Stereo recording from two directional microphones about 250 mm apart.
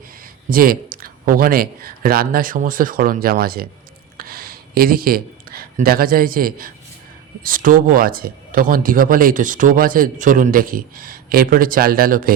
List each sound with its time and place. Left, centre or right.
0.5 s speech: right